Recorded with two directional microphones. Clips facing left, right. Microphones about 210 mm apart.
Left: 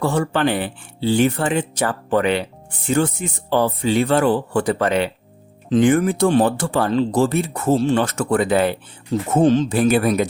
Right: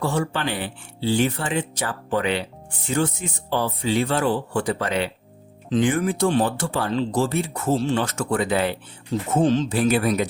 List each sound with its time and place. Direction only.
0.0 s speech: 55° left (ahead or behind)